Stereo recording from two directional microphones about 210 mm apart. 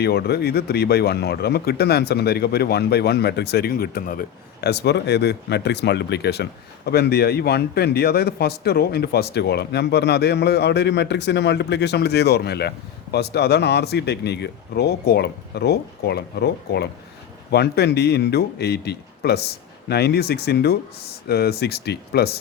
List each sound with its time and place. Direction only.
0.0 s speech: 50° left (ahead or behind)